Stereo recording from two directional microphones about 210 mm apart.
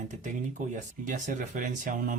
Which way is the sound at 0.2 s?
35° right (ahead or behind).